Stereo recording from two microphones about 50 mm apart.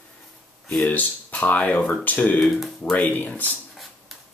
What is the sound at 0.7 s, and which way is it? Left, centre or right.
Speech, left.